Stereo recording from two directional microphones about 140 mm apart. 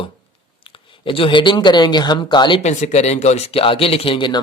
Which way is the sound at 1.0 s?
40° left (ahead or behind).